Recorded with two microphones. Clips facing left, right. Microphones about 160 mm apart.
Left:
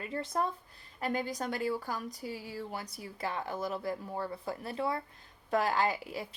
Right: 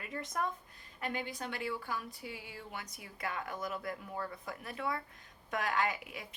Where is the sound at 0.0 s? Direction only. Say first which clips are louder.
Left 4 dB; 30° left (ahead or behind).